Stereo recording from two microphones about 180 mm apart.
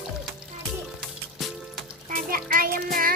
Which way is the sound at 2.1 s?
50° right (ahead or behind).